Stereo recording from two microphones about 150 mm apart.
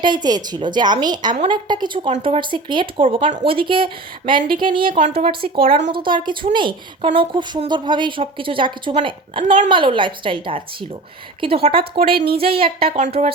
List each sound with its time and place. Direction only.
0.0 s a woman's voice: 30° right (ahead or behind)